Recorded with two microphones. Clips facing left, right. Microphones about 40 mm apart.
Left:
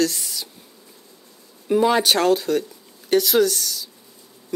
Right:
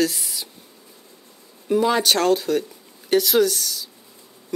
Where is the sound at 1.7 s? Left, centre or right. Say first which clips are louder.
Left 1 dB; centre.